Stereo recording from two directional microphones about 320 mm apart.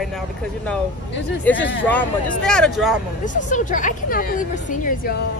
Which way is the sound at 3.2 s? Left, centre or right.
Left.